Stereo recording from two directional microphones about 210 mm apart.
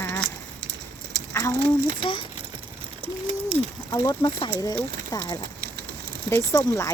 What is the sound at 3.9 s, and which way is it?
Speech, 20° left (ahead or behind).